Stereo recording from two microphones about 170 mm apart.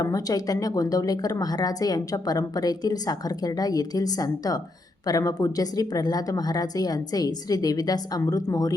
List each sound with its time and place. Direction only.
0.0 s speech: 20° left (ahead or behind)